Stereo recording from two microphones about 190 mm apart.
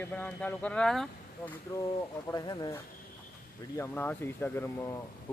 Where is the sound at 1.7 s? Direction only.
15° left (ahead or behind).